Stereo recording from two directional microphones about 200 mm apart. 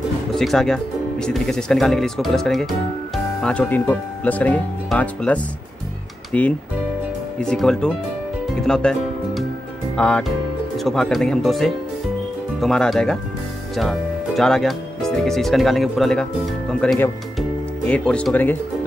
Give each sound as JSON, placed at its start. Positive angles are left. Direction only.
{"t": 0.3, "sound": "speech", "side_deg": 0}
{"t": 8.5, "sound": "music", "side_deg": 5}
{"t": 9.9, "sound": "speech", "side_deg": 5}